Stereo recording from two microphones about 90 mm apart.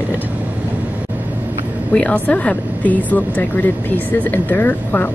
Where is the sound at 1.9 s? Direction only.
15° left (ahead or behind).